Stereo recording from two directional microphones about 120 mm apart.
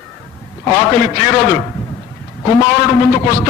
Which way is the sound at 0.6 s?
25° left (ahead or behind).